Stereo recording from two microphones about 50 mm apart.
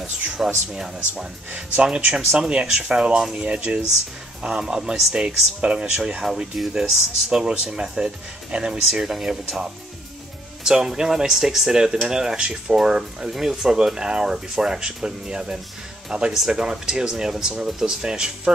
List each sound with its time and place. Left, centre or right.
0.4 s speech: centre
2.1 s speech: centre
6.2 s speech: centre